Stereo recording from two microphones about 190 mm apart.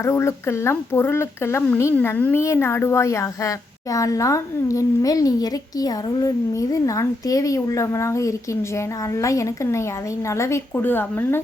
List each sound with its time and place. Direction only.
0.0 s speech: 15° left (ahead or behind)